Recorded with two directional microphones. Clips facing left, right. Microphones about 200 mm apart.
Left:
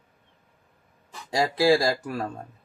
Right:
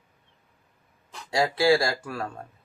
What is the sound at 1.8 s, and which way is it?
Speech, 20° left (ahead or behind).